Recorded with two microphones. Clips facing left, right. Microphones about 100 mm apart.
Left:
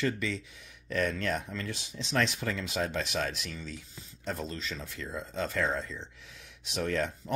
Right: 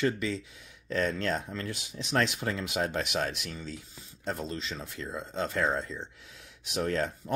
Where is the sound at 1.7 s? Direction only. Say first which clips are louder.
Right 1 dB; 30° left (ahead or behind).